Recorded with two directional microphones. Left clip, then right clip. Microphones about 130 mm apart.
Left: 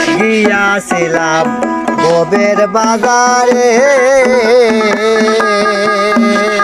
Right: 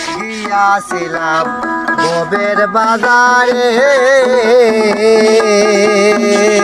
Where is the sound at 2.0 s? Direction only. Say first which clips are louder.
Left 6 dB; 25° left (ahead or behind).